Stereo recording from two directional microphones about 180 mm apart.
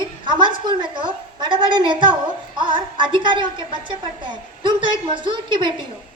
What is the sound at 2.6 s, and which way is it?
A child's voice, 25° right (ahead or behind).